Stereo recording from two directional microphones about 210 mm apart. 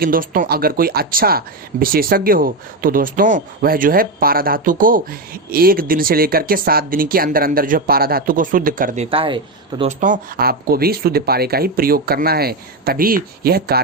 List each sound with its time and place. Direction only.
0.0 s speech: 40° right (ahead or behind)
9.0 s speech: 25° right (ahead or behind)
10.0 s speech: 40° right (ahead or behind)